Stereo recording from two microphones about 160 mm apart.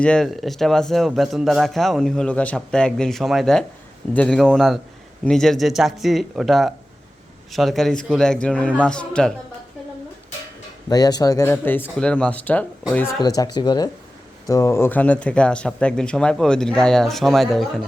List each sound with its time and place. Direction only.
0.0 s speech: 5° left (ahead or behind)
10.8 s speech: 25° left (ahead or behind); by 12.6 s 10° left (ahead or behind)
13.1 s speech: 25° left (ahead or behind); by 17.7 s centre (ahead or behind)